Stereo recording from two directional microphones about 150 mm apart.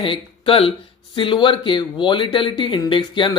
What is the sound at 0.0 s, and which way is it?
Speech, 35° left (ahead or behind).